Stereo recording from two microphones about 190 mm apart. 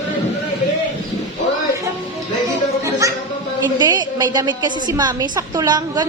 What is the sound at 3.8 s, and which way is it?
A woman's voice, 20° right (ahead or behind).